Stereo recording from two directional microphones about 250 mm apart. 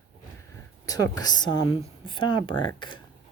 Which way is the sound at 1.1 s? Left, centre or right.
Centre.